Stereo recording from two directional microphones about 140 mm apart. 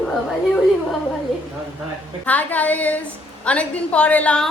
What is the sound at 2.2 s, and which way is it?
A woman's voice, 10° left (ahead or behind).